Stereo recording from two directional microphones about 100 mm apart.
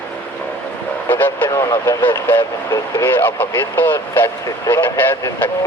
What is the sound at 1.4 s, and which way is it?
Speech, 40° left (ahead or behind).